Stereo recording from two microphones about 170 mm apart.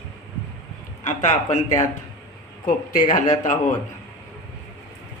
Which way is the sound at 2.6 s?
55° left (ahead or behind).